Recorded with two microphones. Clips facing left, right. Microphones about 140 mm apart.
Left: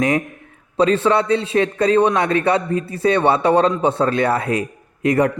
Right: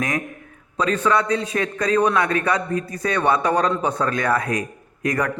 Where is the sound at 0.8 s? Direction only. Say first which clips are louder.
Left 4 dB; 30° left (ahead or behind).